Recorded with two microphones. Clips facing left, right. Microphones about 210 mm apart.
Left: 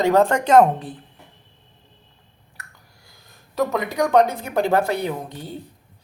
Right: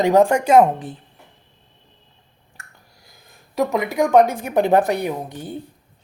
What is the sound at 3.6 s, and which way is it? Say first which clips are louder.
Speech: right 2 dB; 15° right (ahead or behind).